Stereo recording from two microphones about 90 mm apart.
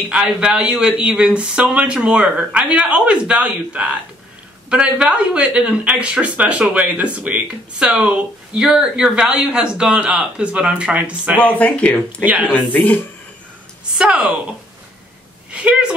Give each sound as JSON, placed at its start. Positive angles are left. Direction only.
{"t": 0.1, "sound": "speech", "side_deg": -10}
{"t": 11.3, "sound": "speech", "side_deg": 15}
{"t": 12.3, "sound": "speech", "side_deg": -15}
{"t": 12.7, "sound": "speech", "side_deg": 20}
{"t": 13.9, "sound": "speech", "side_deg": -10}
{"t": 15.5, "sound": "a woman's voice", "side_deg": -15}